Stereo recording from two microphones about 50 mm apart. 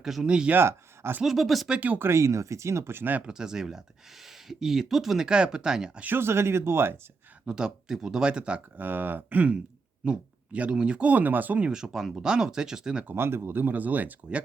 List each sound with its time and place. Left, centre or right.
0.0 s speech: centre
0.3 s speech: right
0.5 s speech: right
1.2 s speech: centre
2.0 s speech: right
2.2 s speech: right
2.9 s speech: right
3.2 s speech: centre
6.1 s speech: right
7.4 s speech: centre
8.8 s speech: right
10.0 s speech: right
11.7 s speech: centre
13.1 s speech: right